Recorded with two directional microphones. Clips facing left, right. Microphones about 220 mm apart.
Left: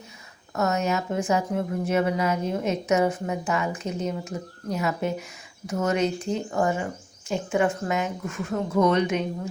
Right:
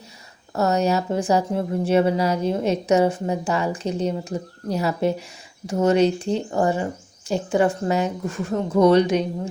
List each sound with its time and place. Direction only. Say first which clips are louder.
0.5 s a woman's voice: right 4 dB; 35° right (ahead or behind)